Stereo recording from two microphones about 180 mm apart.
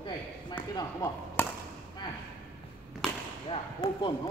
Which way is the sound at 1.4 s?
10° left (ahead or behind).